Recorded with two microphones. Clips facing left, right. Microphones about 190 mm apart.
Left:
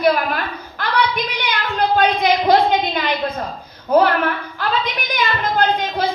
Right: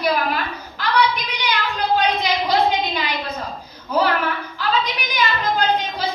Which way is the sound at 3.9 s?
55° left (ahead or behind).